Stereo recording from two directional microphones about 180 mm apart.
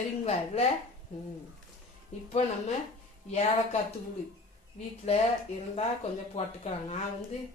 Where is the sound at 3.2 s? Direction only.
35° left (ahead or behind).